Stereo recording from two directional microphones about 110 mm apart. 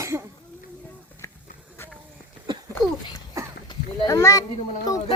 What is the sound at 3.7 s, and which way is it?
Speech, 35° left (ahead or behind).